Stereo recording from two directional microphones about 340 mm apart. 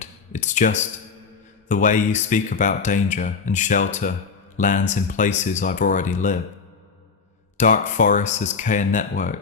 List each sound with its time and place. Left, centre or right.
0.0 s a sound: left
1.6 s speech: left
7.5 s speech: left